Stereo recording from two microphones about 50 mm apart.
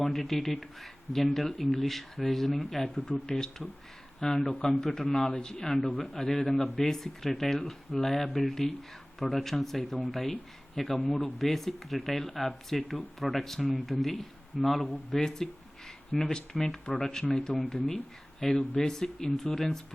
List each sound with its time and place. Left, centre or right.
0.0 s speech: centre
4.4 s a man's voice: left
4.7 s speech: centre